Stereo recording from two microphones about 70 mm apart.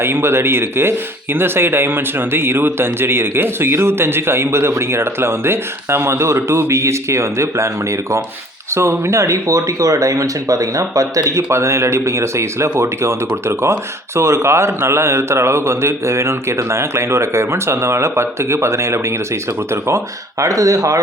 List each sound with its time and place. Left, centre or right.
0.0 s speech: right
20.4 s speech: right